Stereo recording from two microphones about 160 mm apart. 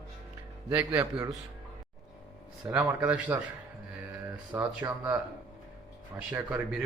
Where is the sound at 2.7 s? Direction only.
10° right (ahead or behind).